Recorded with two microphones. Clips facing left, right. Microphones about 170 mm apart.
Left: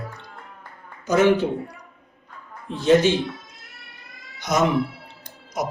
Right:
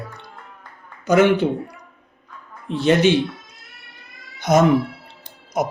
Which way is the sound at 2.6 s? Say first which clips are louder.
Right 1 dB; 70° right (ahead or behind).